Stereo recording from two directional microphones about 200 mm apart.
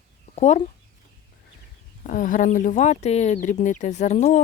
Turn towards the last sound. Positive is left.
turn(degrees=35)  # may be behind; listen again after turning